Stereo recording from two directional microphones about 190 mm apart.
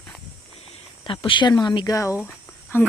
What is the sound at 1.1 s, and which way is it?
Speech, 25° left (ahead or behind).